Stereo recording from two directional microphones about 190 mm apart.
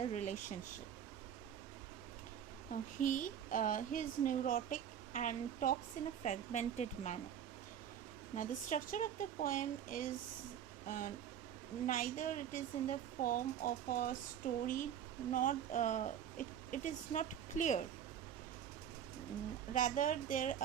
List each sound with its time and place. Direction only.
0.0 s speech: 35° left (ahead or behind)
3.0 s speech: 45° left (ahead or behind)
8.4 s speech: 45° left (ahead or behind)
19.7 s speech: 45° left (ahead or behind)